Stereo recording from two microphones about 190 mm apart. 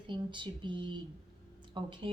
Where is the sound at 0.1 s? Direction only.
25° right (ahead or behind).